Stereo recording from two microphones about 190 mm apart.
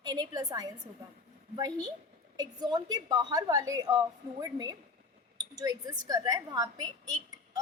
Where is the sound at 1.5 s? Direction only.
20° right (ahead or behind).